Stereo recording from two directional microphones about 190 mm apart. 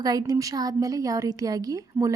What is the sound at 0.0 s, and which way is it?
Speech, 20° right (ahead or behind).